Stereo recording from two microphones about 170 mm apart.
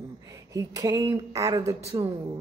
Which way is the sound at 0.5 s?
20° right (ahead or behind).